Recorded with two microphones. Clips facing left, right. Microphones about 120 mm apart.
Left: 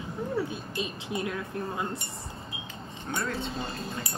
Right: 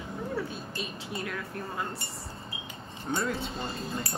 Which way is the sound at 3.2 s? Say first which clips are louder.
Even; centre (ahead or behind).